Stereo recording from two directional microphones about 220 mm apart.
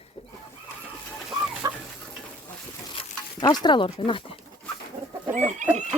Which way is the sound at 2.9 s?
25° left (ahead or behind).